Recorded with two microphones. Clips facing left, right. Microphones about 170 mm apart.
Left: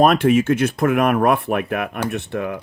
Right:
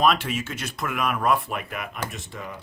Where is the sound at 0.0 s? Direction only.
50° left (ahead or behind).